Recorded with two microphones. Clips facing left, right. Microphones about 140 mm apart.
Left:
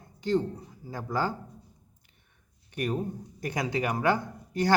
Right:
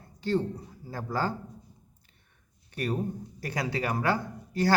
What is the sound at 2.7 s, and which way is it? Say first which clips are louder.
Speech: even; 15° left (ahead or behind).